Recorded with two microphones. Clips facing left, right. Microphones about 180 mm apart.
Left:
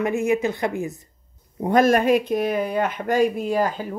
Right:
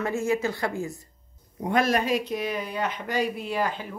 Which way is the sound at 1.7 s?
45° left (ahead or behind).